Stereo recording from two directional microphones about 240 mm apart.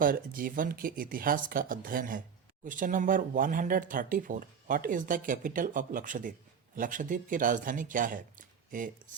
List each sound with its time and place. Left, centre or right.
0.0 s speech: right